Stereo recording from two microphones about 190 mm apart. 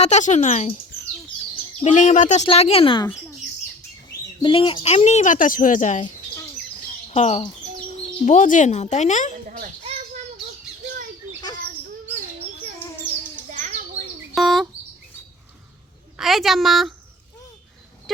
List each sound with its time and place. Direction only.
0.0 s speech: 40° left (ahead or behind)
1.8 s speech: 40° left (ahead or behind)
4.1 s speech: 25° left (ahead or behind); by 6.1 s 40° left (ahead or behind)
7.1 s speech: 35° left (ahead or behind)
13.5 s bird: 40° right (ahead or behind)
14.3 s speech: centre (ahead or behind)
16.1 s speech: centre (ahead or behind)